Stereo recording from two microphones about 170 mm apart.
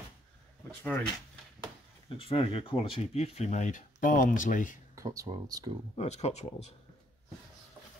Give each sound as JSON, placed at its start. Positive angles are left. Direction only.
{"t": 0.7, "sound": "speech", "side_deg": 10}
{"t": 2.0, "sound": "speech", "side_deg": 35}
{"t": 4.9, "sound": "speech", "side_deg": -20}
{"t": 5.9, "sound": "speech", "side_deg": 40}